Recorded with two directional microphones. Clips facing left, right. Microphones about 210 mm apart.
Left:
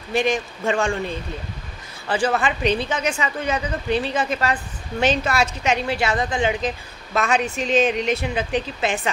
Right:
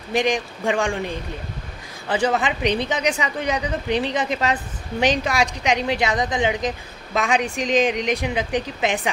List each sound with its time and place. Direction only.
0.1 s speech: 15° right (ahead or behind)